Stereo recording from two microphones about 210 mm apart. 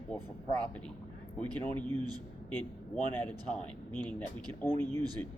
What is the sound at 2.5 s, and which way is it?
Speech, 10° left (ahead or behind).